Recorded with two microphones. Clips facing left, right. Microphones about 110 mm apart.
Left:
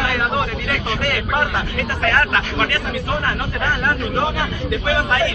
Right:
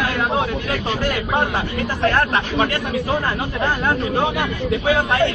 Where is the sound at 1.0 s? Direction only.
25° right (ahead or behind).